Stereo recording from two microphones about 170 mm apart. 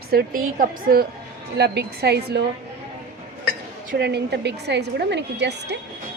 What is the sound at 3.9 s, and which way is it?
A woman's voice, 75° right (ahead or behind).